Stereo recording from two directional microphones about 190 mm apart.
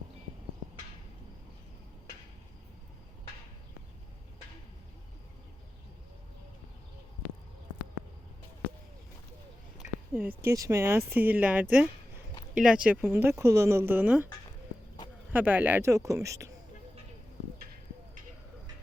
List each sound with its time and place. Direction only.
9.8 s a sound: 40° left (ahead or behind)
10.2 s speech: 10° right (ahead or behind)
15.3 s speech: 10° right (ahead or behind)